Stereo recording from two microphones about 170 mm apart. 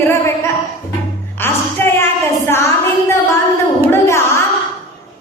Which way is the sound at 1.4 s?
15° left (ahead or behind).